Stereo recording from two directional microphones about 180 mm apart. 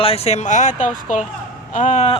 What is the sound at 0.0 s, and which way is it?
Speech, 35° left (ahead or behind).